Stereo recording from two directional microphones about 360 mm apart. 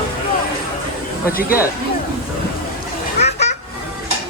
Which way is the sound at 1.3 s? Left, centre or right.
Left.